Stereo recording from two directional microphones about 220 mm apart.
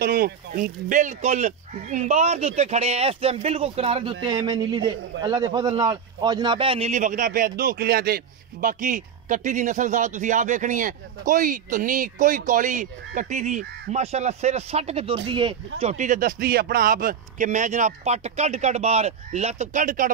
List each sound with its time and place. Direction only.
0.0 s a man's voice: 40° right (ahead or behind)